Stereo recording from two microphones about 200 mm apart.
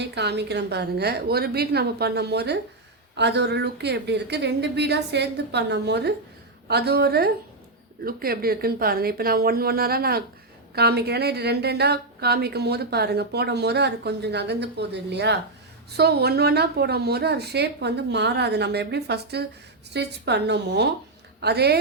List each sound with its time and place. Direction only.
0.0 s a woman's voice: 60° right (ahead or behind)